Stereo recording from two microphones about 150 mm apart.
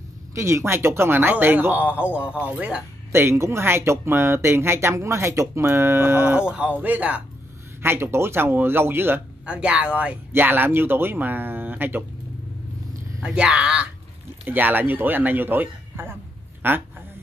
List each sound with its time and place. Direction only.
0.3 s speech: 20° right (ahead or behind)
2.0 s speech: 15° left (ahead or behind)
2.4 s speech: 10° right (ahead or behind)
13.2 s speech: 5° right (ahead or behind)